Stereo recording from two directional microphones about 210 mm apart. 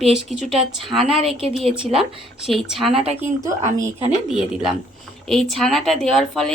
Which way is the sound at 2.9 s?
30° right (ahead or behind).